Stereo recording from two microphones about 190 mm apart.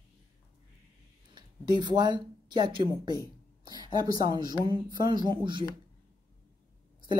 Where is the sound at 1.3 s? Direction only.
25° right (ahead or behind).